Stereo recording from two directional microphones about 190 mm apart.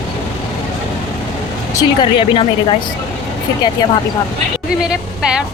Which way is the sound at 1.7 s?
20° left (ahead or behind).